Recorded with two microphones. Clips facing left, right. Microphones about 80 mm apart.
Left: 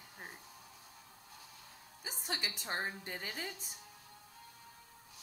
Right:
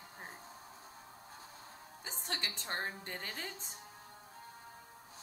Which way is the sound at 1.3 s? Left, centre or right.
Right.